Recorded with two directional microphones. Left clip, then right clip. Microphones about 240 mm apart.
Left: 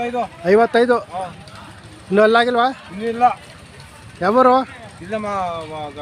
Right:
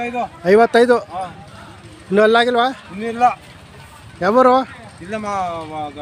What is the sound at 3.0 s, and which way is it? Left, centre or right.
Speech, right.